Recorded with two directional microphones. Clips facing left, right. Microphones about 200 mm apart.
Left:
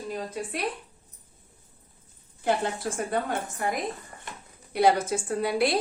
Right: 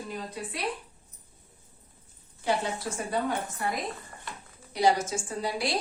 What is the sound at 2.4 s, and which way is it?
Speech, 55° left (ahead or behind).